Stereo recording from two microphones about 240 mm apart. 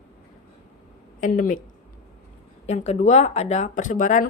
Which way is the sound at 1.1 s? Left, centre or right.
Left.